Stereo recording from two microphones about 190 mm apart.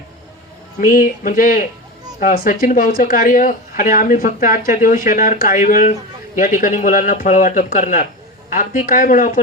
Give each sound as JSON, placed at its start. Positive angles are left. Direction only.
{"t": 0.8, "sound": "speech", "side_deg": 45}